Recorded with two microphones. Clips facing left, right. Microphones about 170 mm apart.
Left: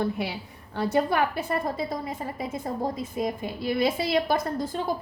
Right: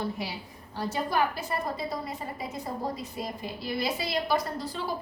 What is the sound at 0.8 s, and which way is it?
A woman's voice, 65° left (ahead or behind).